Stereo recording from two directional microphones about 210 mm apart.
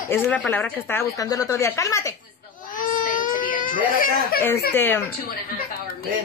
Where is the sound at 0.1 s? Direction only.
10° left (ahead or behind).